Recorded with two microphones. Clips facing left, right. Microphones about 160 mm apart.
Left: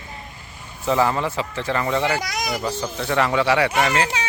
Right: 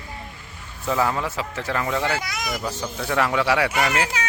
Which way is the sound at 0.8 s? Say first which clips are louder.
Left 3 dB; centre (ahead or behind).